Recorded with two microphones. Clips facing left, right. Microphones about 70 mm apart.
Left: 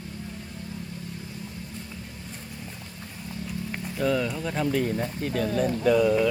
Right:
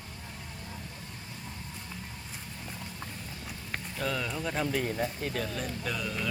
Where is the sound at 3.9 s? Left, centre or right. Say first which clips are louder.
Left 8 dB; centre.